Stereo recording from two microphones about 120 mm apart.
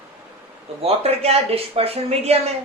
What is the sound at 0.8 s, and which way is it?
Speech, 55° right (ahead or behind).